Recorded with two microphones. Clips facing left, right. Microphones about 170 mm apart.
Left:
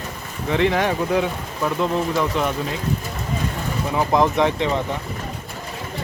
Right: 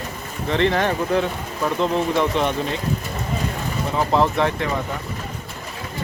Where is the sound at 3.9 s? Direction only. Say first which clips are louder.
Left 1 dB; 15° left (ahead or behind).